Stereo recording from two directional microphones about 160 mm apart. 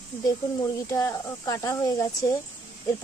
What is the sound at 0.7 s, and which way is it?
Speech, 20° left (ahead or behind).